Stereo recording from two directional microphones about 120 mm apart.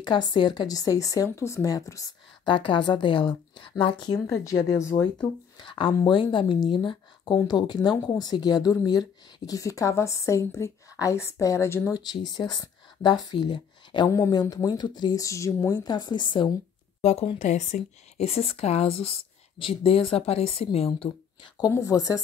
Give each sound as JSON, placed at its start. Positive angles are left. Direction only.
{"t": 0.0, "sound": "speech", "side_deg": 40}
{"t": 2.4, "sound": "a woman's voice", "side_deg": 45}
{"t": 5.2, "sound": "a woman's voice", "side_deg": 40}
{"t": 11.9, "sound": "speech", "side_deg": 35}
{"t": 14.1, "sound": "a woman's voice", "side_deg": 25}
{"t": 17.0, "sound": "a woman's voice", "side_deg": 60}
{"t": 17.4, "sound": "a woman's voice", "side_deg": 75}
{"t": 21.4, "sound": "a woman's voice", "side_deg": 35}